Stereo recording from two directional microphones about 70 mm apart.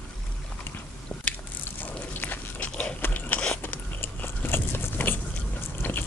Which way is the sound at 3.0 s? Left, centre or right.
Left.